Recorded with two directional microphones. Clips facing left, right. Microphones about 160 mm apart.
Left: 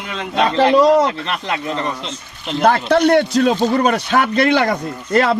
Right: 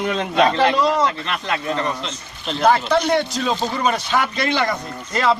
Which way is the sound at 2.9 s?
60° left (ahead or behind).